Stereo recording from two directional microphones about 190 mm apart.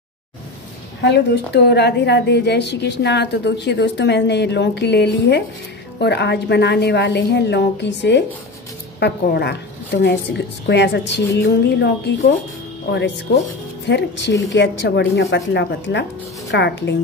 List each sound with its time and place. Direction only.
1.0 s a woman's voice: 65° left (ahead or behind)